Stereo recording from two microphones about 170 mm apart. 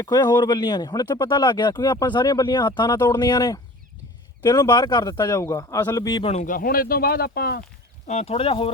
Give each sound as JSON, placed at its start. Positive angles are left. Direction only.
{"t": 0.0, "sound": "speech", "side_deg": 20}
{"t": 6.2, "sound": "speech", "side_deg": 45}
{"t": 8.0, "sound": "speech", "side_deg": 40}